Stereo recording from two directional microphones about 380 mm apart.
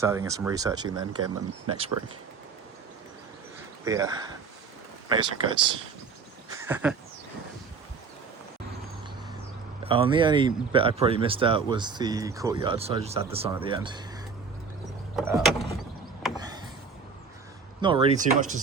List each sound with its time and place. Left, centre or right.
0.0 s speech: centre
1.6 s speech: right
3.8 s speech: centre
6.7 s a sound: centre
9.8 s speech: centre
15.1 s vehicle: centre
17.7 s speech: centre